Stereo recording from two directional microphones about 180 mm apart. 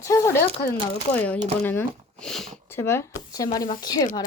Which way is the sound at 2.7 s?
15° left (ahead or behind).